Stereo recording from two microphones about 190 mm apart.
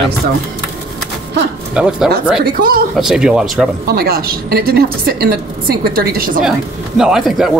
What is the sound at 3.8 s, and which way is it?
A woman's voice, 55° right (ahead or behind).